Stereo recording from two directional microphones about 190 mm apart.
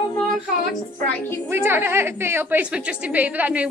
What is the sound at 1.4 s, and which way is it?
A woman's voice, 10° right (ahead or behind).